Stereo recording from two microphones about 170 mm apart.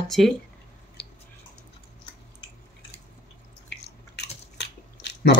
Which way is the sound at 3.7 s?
85° left.